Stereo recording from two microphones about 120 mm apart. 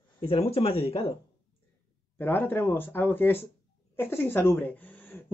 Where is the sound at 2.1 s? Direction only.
15° left (ahead or behind).